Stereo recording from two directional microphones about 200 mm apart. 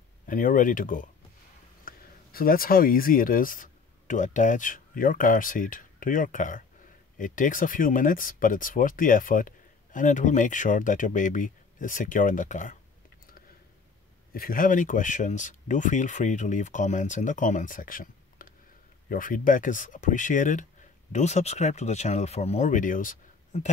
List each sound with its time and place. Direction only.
0.3 s speech: 40° left (ahead or behind)
14.3 s speech: 45° left (ahead or behind)